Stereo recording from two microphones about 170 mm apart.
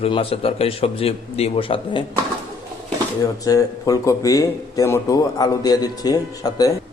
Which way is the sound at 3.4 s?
20° left (ahead or behind).